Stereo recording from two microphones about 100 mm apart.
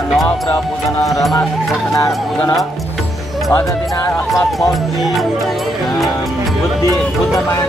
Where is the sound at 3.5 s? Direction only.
20° left (ahead or behind).